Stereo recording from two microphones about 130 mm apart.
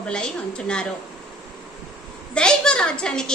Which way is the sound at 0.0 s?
5° left (ahead or behind).